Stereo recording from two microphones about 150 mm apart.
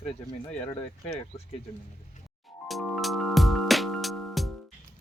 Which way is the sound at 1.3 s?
35° left (ahead or behind).